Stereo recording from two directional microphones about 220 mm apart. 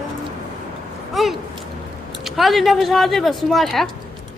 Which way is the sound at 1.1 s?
Centre (ahead or behind).